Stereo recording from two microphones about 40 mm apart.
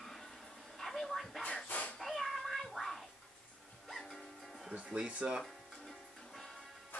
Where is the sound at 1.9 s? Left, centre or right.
Centre.